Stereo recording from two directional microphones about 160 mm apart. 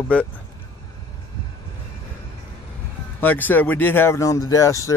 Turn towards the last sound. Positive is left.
turn(degrees=20)  # may be behind; listen again after turning